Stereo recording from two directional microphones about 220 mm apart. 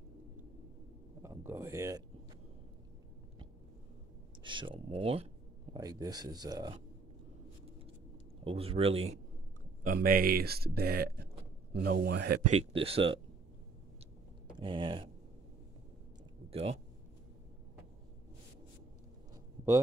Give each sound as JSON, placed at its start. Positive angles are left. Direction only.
{"t": 1.2, "sound": "speech", "side_deg": -10}
{"t": 4.4, "sound": "speech", "side_deg": -20}
{"t": 8.5, "sound": "speech", "side_deg": -25}
{"t": 9.8, "sound": "speech", "side_deg": -40}
{"t": 12.5, "sound": "speech", "side_deg": -25}
{"t": 14.6, "sound": "speech", "side_deg": -20}
{"t": 16.4, "sound": "a sound", "side_deg": -25}